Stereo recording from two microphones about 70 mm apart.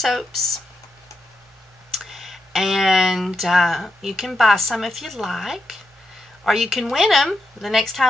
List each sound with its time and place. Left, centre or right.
0.0 s speech: centre
1.9 s speech: centre